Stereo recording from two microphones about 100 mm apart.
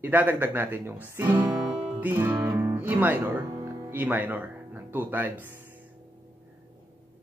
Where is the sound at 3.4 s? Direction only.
35° right (ahead or behind).